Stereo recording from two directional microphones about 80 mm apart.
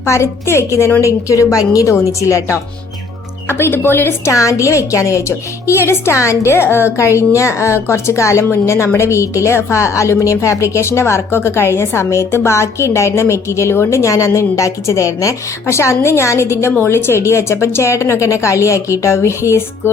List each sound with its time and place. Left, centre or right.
0.0 s a woman's voice: left
3.6 s speech: left
4.3 s a woman's voice: left